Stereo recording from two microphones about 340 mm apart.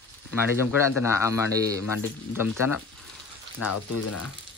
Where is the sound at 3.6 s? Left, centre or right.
Left.